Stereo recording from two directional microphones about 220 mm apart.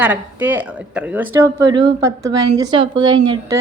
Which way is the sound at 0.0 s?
10° right (ahead or behind).